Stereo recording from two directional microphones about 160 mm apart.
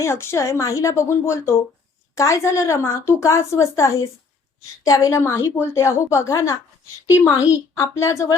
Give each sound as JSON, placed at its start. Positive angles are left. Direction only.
{"t": 0.0, "sound": "a woman's voice", "side_deg": 15}
{"t": 7.8, "sound": "a woman's voice", "side_deg": 15}